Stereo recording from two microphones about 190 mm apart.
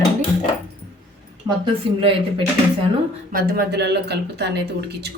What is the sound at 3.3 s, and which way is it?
A woman's voice, 60° right (ahead or behind).